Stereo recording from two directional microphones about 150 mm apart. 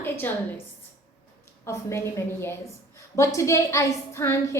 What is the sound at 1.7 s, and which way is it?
A woman's voice, 20° left (ahead or behind).